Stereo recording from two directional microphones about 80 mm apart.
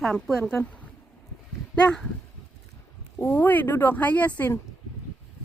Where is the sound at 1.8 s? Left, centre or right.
Centre.